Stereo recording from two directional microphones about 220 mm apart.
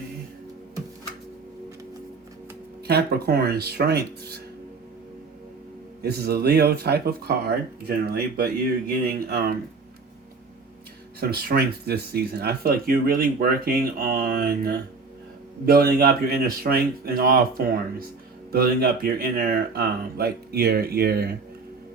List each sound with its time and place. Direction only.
2.8 s speech: 45° right (ahead or behind)
6.0 s speech: 45° right (ahead or behind)
11.2 s speech: 45° right (ahead or behind)